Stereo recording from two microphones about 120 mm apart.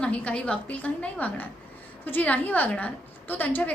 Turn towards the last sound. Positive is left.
turn(degrees=15)  # may be behind; listen again after turning